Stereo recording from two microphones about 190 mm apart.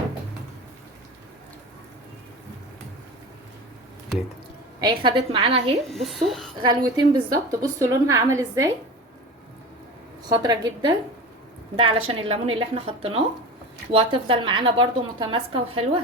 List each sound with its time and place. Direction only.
4.8 s speech: 25° right (ahead or behind)
5.9 s speech: centre (ahead or behind)
6.6 s a woman's voice: 20° right (ahead or behind)
10.2 s speech: 20° right (ahead or behind)